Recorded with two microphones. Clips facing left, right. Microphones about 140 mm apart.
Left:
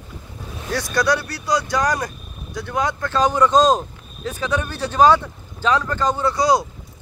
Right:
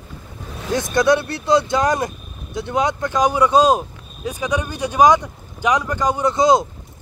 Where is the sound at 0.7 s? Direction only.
20° right (ahead or behind).